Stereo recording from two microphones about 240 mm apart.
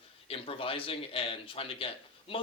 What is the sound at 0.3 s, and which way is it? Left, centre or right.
Speech, left.